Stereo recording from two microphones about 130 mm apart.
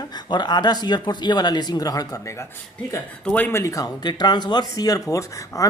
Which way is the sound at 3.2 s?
10° left (ahead or behind).